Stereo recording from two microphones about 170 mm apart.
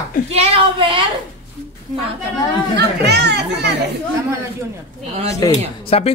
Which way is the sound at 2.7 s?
75° right (ahead or behind).